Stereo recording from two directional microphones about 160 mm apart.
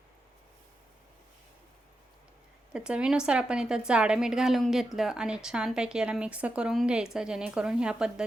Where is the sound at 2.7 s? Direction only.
5° right (ahead or behind).